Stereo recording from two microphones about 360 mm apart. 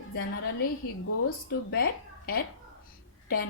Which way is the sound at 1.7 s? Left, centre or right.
Left.